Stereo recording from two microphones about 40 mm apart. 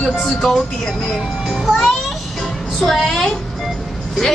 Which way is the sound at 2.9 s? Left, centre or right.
Centre.